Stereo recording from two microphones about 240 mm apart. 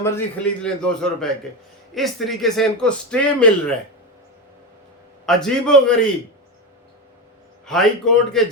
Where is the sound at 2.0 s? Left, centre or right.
Centre.